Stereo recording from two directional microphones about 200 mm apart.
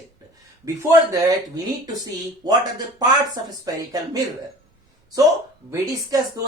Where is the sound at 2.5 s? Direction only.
20° right (ahead or behind).